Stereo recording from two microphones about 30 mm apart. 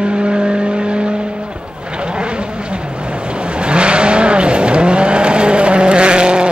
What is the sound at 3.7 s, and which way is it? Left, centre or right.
Vehicle, right.